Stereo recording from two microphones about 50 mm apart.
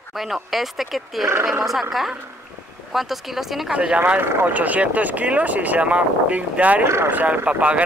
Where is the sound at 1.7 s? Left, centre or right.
Centre.